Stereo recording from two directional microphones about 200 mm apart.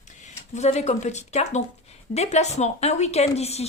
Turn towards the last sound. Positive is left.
turn(degrees=30)  # may be behind; listen again after turning